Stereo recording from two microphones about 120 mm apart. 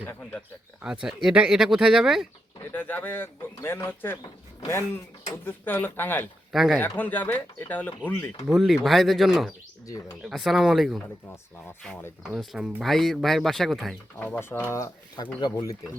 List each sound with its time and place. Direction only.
0.8 s speech: 5° right (ahead or behind)
2.7 s speech: 15° left (ahead or behind)
6.5 s speech: centre (ahead or behind)
6.7 s speech: 15° left (ahead or behind)
8.4 s speech: centre (ahead or behind)
9.8 s speech: 30° left (ahead or behind)
10.2 s speech: centre (ahead or behind)
12.3 s speech: centre (ahead or behind)
14.2 s speech: 15° left (ahead or behind)
15.4 s speech: 35° left (ahead or behind)